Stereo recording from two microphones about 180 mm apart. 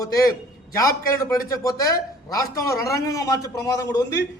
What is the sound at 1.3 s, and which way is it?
A man's voice, 20° left (ahead or behind).